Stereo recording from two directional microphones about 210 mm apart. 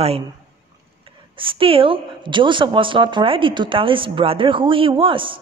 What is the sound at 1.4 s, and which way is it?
Speech, 25° right (ahead or behind).